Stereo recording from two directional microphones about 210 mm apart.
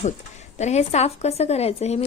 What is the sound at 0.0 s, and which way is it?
Speech, 35° left (ahead or behind).